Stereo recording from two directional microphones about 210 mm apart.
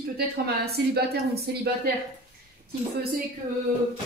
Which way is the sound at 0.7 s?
50° right (ahead or behind).